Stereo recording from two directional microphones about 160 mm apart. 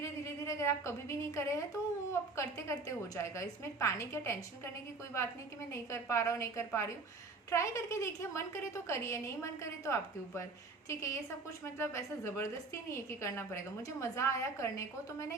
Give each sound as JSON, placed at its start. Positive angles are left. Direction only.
{"t": 0.0, "sound": "a woman's voice", "side_deg": 20}
{"t": 5.7, "sound": "a woman's voice", "side_deg": 20}